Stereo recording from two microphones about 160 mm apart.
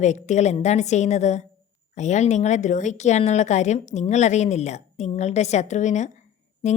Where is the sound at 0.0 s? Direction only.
50° left (ahead or behind).